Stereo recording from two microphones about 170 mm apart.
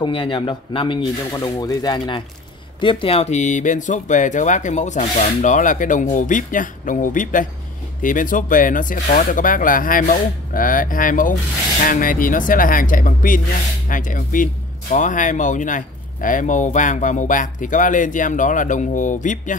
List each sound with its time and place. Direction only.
0.0 s speech: 30° left (ahead or behind); by 19.5 s 50° left (ahead or behind)